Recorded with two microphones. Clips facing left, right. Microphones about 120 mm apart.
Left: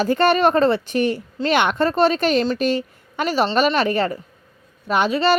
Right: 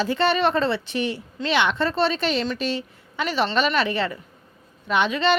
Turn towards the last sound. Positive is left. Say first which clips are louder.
# left 3 dB
turn(degrees=40)  # may be behind; listen again after turning